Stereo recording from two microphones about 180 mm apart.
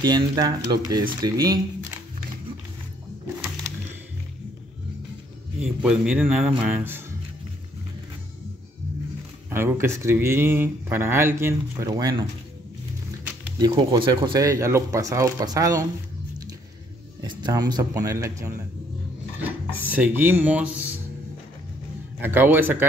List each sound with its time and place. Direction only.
0.0 s speech: 20° right (ahead or behind)
5.6 s speech: 5° right (ahead or behind)
9.5 s speech: 15° right (ahead or behind)
13.6 s speech: 25° right (ahead or behind)
17.2 s speech: 25° right (ahead or behind)
19.8 s speech: 10° right (ahead or behind)
22.2 s speech: 10° right (ahead or behind)